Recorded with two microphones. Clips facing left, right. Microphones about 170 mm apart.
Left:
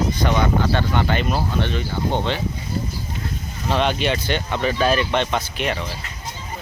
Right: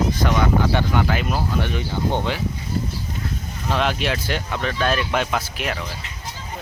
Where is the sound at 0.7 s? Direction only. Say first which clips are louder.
Even; 15° right (ahead or behind).